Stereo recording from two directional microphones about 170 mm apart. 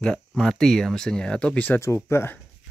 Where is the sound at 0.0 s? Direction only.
5° left (ahead or behind).